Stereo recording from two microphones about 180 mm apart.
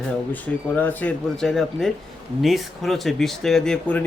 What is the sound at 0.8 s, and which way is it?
Speech, 10° left (ahead or behind).